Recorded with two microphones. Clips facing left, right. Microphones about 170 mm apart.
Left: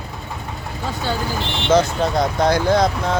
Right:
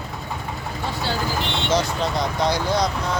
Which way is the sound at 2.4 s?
50° left (ahead or behind).